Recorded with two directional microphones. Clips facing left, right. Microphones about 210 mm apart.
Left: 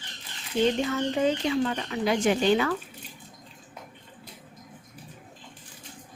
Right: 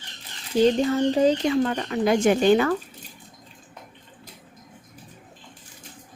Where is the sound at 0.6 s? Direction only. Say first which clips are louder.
Right 5 dB; 35° right (ahead or behind).